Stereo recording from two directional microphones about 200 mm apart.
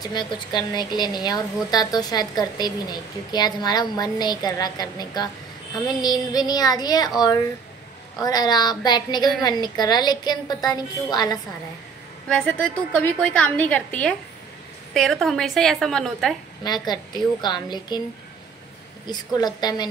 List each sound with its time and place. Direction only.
0.1 s a woman's voice: 20° left (ahead or behind)
8.2 s a woman's voice: 20° left (ahead or behind)
12.3 s a woman's voice: 5° left (ahead or behind)
16.6 s a woman's voice: 20° left (ahead or behind)
19.0 s a woman's voice: 20° left (ahead or behind)